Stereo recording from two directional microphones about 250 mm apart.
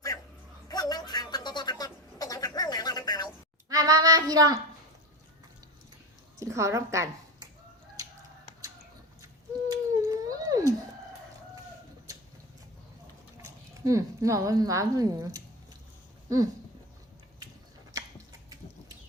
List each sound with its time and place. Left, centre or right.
0.7 s a sound: centre
3.7 s child singing: centre
6.4 s a woman's voice: centre
9.2 s cat: centre
13.4 s speech: centre
17.9 s a sound: centre